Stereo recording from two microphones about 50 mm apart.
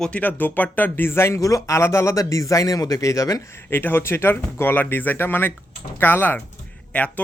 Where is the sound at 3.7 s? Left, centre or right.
Left.